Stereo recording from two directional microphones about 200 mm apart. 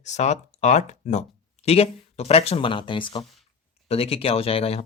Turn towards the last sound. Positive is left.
turn(degrees=30)  # may be behind; listen again after turning